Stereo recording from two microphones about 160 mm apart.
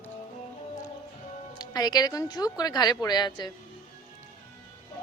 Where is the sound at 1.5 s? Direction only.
25° left (ahead or behind).